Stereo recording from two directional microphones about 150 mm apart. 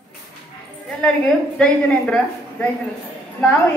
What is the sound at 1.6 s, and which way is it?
Speech, 5° left (ahead or behind).